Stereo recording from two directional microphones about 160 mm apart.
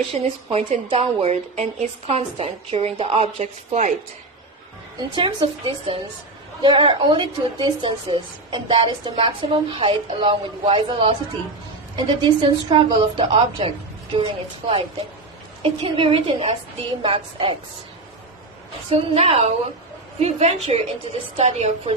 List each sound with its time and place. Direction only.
0.1 s a woman's voice: 35° right (ahead or behind)
4.9 s a woman's voice: 35° right (ahead or behind)
18.9 s a woman's voice: 35° right (ahead or behind)
20.7 s a woman's voice: 35° right (ahead or behind)